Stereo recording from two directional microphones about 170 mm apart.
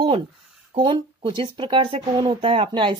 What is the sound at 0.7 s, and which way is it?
Speech, 30° right (ahead or behind).